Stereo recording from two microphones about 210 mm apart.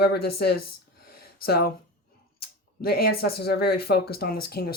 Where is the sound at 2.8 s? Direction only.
45° left (ahead or behind).